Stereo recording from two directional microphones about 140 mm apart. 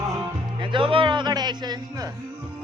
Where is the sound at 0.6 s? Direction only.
35° right (ahead or behind).